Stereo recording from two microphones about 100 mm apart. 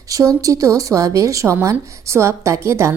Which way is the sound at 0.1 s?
35° right (ahead or behind).